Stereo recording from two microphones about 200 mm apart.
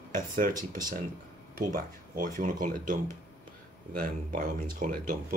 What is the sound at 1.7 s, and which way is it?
Speech, 40° right (ahead or behind).